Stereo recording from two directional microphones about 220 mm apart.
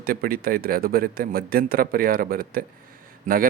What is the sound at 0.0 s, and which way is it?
A man's voice, 45° right (ahead or behind).